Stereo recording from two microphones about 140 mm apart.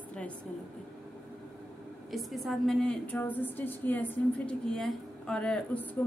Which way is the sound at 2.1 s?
Centre (ahead or behind).